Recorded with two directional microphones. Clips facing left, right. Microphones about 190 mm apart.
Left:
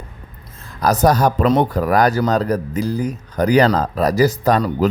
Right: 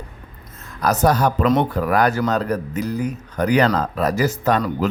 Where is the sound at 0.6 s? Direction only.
35° left (ahead or behind).